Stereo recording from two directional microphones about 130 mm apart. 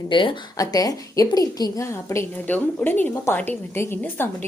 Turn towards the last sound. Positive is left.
turn(degrees=15)  # may be behind; listen again after turning